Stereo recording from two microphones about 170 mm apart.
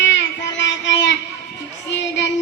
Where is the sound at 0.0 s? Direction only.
90° left.